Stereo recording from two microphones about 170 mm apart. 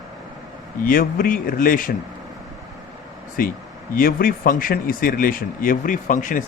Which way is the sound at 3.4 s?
60° left (ahead or behind).